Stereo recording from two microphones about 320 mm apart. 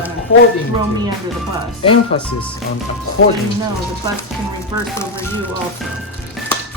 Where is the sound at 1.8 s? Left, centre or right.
Centre.